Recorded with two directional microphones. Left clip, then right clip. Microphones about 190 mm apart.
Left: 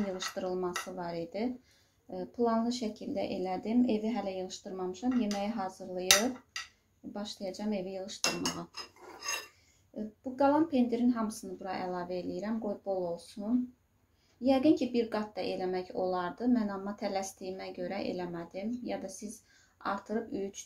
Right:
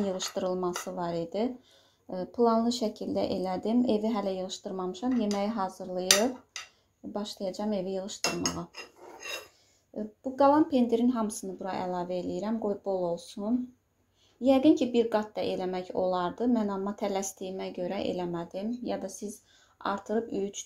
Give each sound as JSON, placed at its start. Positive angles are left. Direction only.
{"t": 0.0, "sound": "speech", "side_deg": -35}
{"t": 7.1, "sound": "speech", "side_deg": -30}
{"t": 10.3, "sound": "speech", "side_deg": -35}
{"t": 14.4, "sound": "speech", "side_deg": -35}